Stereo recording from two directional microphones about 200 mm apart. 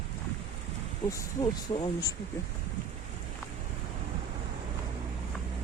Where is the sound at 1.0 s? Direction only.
15° left (ahead or behind).